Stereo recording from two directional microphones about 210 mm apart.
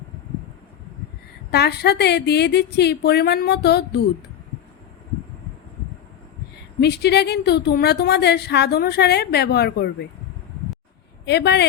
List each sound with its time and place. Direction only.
1.5 s a woman's voice: 50° left (ahead or behind)
6.7 s a woman's voice: 50° left (ahead or behind)
11.3 s a woman's voice: 55° left (ahead or behind)